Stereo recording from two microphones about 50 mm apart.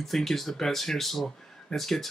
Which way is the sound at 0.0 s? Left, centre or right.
Centre.